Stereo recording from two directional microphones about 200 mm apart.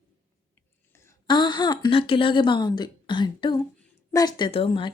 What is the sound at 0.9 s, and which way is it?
Speech, 20° left (ahead or behind).